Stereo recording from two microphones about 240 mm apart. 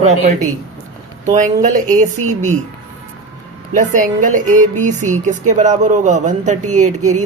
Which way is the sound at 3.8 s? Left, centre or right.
Right.